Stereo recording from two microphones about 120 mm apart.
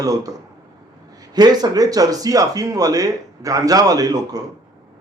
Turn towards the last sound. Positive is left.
turn(degrees=-30)  # may be behind; listen again after turning